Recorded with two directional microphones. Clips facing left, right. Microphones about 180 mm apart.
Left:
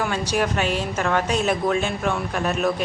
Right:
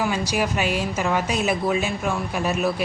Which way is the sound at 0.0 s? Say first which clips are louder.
Even; 10° right (ahead or behind).